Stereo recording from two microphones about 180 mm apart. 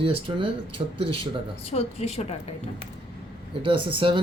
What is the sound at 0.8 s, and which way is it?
Speech, 30° right (ahead or behind).